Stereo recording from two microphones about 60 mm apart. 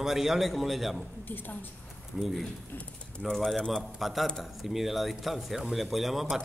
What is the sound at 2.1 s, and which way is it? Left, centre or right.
Speech, centre.